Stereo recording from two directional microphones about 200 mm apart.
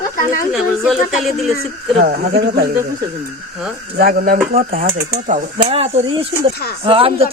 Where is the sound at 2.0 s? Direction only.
45° right (ahead or behind).